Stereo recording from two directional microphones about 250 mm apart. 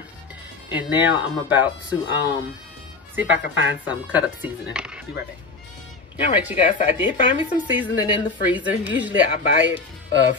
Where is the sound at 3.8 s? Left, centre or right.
Centre.